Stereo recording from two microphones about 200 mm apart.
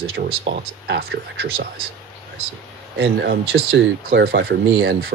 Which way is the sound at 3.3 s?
55° right (ahead or behind).